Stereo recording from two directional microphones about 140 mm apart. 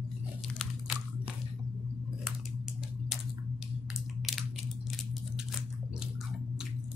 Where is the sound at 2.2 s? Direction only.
Centre (ahead or behind).